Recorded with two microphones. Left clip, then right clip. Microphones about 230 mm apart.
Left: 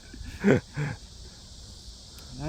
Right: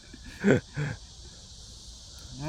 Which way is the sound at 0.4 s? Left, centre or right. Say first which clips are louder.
Left 1 dB; centre.